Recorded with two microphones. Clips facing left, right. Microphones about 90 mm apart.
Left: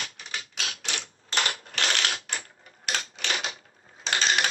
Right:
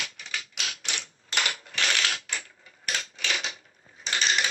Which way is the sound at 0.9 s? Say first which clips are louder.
Left 1 dB; 35° left (ahead or behind).